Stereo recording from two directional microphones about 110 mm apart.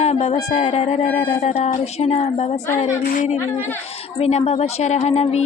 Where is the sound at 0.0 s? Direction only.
90° left.